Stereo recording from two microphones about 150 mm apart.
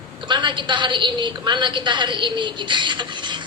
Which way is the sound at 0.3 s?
30° right (ahead or behind).